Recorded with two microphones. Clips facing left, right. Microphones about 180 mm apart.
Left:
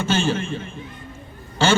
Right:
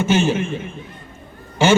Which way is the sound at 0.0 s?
20° right (ahead or behind).